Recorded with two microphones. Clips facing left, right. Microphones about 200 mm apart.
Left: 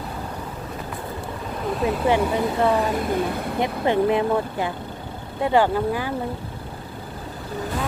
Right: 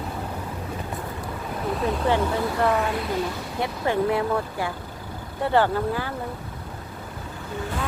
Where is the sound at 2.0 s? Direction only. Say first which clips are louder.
Left 3 dB; 15° left (ahead or behind).